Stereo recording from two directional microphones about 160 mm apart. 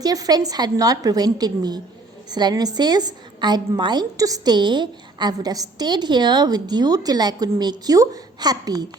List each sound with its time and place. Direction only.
0.0 s a woman's voice: 25° right (ahead or behind)